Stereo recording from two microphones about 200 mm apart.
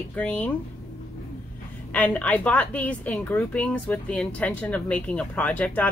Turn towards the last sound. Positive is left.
turn(degrees=5)  # may be behind; listen again after turning